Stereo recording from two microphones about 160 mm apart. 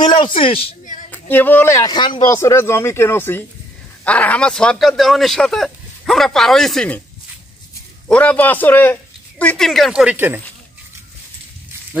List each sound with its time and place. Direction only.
0.0 s speech: 30° left (ahead or behind)
1.1 s speech: 10° left (ahead or behind); by 2.3 s 30° left (ahead or behind)
2.3 s a man's voice: 15° left (ahead or behind)
8.1 s a man's voice: 10° left (ahead or behind); by 10.4 s 10° right (ahead or behind)